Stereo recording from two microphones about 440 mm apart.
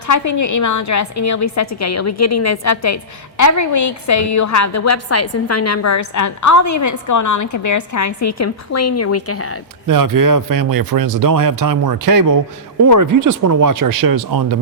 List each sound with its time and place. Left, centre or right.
0.1 s a woman's voice: left
9.8 s speech: right